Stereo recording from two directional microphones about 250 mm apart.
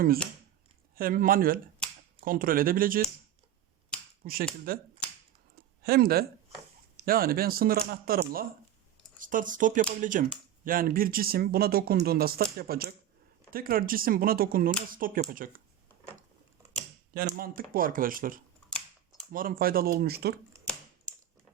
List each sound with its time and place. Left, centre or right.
0.9 s speech: right
4.2 s speech: right
5.5 s a sound: right
6.9 s speech: right
17.2 s speech: right